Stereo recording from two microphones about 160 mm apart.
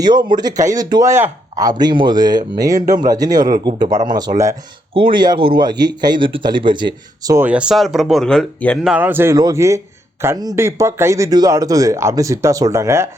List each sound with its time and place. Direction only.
0.0 s a man's voice: 30° right (ahead or behind)
7.3 s speech: 10° right (ahead or behind)
8.9 s a man's voice: 10° right (ahead or behind)